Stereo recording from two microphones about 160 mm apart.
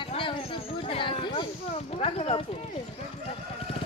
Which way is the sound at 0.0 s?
30° left (ahead or behind).